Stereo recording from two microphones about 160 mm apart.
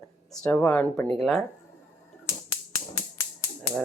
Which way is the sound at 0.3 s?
5° left (ahead or behind).